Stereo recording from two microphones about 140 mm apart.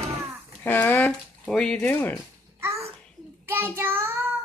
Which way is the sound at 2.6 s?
20° right (ahead or behind).